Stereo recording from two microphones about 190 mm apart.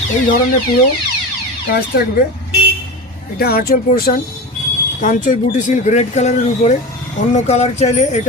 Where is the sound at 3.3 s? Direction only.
55° left (ahead or behind).